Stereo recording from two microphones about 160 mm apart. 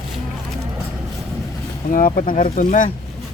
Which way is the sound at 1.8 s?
55° left (ahead or behind).